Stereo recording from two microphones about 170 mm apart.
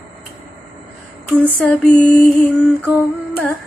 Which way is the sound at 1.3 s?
10° left (ahead or behind).